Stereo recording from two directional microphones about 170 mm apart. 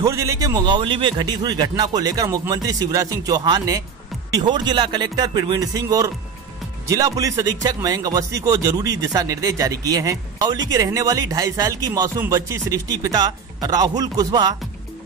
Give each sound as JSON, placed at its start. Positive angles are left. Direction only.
{"t": 0.0, "sound": "speech", "side_deg": -20}